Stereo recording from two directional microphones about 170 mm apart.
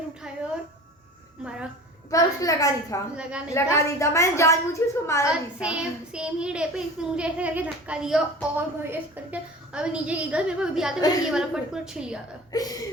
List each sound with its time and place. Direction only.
2.0 s a woman's voice: 20° left (ahead or behind)
3.2 s a child's voice: 5° right (ahead or behind)
3.5 s a woman's voice: 15° left (ahead or behind)
5.3 s a child's voice: 5° right (ahead or behind)
12.5 s speech: 20° left (ahead or behind)